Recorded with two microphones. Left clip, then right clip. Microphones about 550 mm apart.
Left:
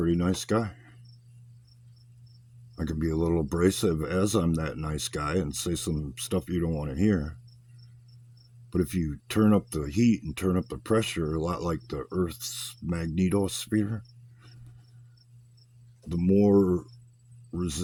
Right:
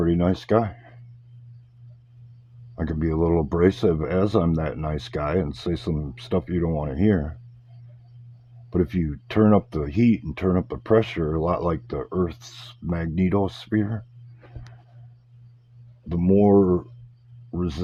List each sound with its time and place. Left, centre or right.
0.0 s speech: left
2.7 s speech: left
8.7 s speech: left
16.0 s speech: left